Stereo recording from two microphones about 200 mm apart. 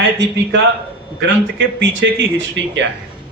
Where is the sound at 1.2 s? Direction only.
65° right (ahead or behind).